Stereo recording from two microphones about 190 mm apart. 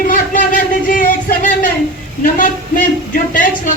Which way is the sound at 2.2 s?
45° left (ahead or behind).